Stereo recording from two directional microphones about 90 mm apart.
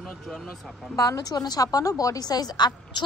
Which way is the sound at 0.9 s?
45° left (ahead or behind).